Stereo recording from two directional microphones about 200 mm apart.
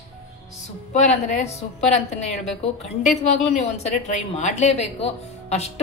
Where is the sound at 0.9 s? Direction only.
35° left (ahead or behind).